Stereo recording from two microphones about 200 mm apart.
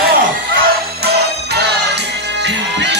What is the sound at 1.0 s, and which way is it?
Music, 55° right (ahead or behind).